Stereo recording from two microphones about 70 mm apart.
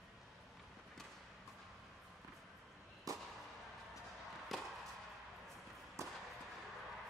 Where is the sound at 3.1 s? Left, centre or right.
Right.